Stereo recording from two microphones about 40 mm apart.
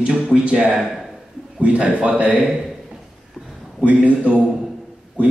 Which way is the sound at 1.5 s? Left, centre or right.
Right.